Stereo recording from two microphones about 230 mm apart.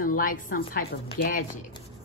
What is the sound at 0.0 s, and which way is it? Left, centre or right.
Speech, left.